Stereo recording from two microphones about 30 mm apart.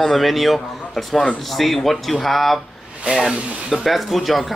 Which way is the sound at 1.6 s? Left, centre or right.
Centre.